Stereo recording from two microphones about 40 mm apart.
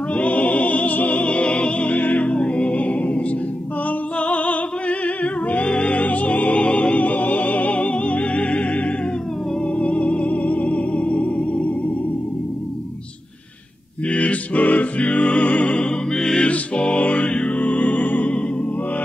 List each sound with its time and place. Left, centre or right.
0.1 s music: left
2.2 s music: left
14.0 s music: left